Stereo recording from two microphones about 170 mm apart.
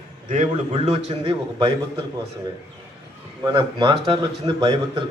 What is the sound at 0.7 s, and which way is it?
Speech, 35° right (ahead or behind).